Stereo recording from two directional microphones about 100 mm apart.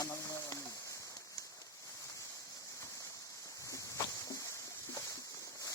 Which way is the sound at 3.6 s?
30° left (ahead or behind).